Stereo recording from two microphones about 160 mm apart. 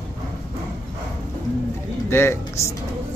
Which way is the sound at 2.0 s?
15° left (ahead or behind).